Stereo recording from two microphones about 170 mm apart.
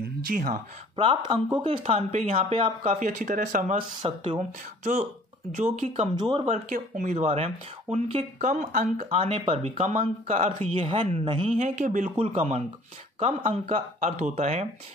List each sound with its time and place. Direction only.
0.2 s speech: 55° right (ahead or behind)
0.9 s speech: 30° right (ahead or behind)
2.8 s speech: 50° right (ahead or behind)
4.0 s speech: 30° right (ahead or behind)
5.5 s speech: 40° right (ahead or behind)
6.1 s speech: 25° right (ahead or behind)
6.4 s speech: 45° right (ahead or behind)
9.2 s speech: 35° right (ahead or behind)
11.5 s speech: 45° right (ahead or behind)
13.9 s speech: 45° right (ahead or behind)